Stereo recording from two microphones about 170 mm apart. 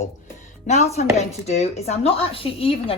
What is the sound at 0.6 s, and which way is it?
Speech, 40° left (ahead or behind).